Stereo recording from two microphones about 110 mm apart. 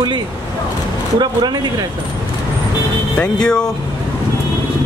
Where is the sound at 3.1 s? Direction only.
10° left (ahead or behind).